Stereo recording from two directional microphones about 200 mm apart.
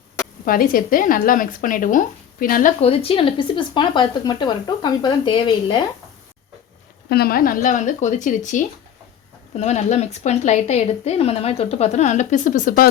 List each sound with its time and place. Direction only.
0.4 s speech: 45° left (ahead or behind)
2.8 s speech: 30° left (ahead or behind)
7.1 s speech: 50° left (ahead or behind)